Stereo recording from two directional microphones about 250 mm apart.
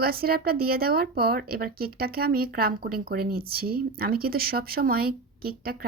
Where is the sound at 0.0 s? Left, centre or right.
Right.